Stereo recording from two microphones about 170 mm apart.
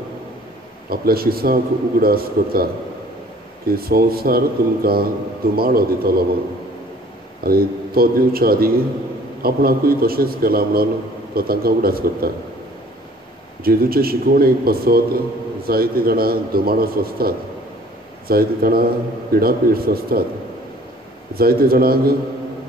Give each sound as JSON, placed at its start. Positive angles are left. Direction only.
{"t": 0.8, "sound": "a man's voice", "side_deg": -60}
{"t": 7.4, "sound": "a man's voice", "side_deg": -60}
{"t": 13.7, "sound": "a man's voice", "side_deg": -60}
{"t": 21.4, "sound": "a man's voice", "side_deg": -60}